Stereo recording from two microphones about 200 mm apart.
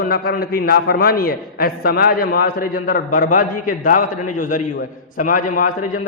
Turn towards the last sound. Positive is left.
turn(degrees=40)  # may be behind; listen again after turning